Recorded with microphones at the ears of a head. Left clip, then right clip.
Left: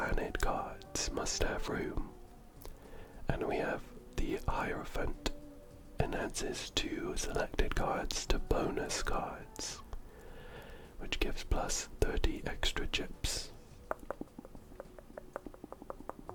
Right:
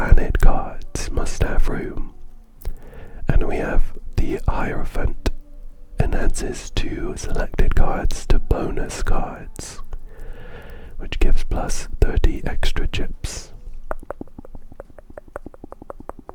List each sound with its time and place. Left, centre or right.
0.0 s whispering: right